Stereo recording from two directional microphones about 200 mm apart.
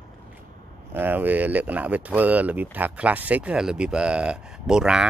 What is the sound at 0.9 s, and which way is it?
Speech, 10° right (ahead or behind).